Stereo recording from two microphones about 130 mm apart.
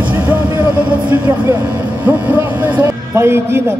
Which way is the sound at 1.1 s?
15° right (ahead or behind).